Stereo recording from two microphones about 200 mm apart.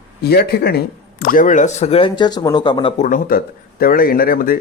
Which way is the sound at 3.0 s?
45° left (ahead or behind).